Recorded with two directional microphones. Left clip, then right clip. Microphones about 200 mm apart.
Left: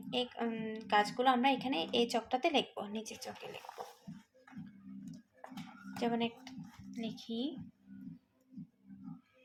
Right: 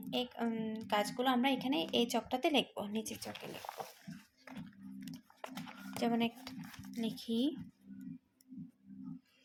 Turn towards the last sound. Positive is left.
turn(degrees=-35)  # may be behind; listen again after turning